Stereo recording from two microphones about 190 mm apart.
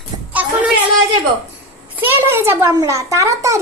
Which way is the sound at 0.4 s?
10° right (ahead or behind).